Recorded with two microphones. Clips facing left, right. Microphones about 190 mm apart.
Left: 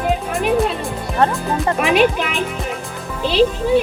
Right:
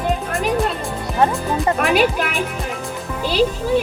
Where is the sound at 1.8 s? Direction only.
Centre (ahead or behind).